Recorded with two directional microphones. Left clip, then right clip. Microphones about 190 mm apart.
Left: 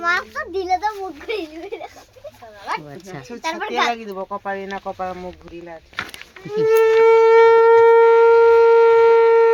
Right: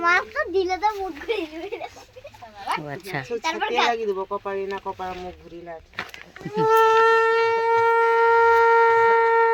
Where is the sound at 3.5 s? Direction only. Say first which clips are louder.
Left 2 dB; 25° left (ahead or behind).